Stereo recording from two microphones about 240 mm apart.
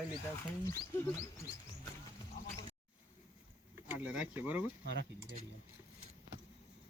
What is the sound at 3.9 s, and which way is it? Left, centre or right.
Speech, centre.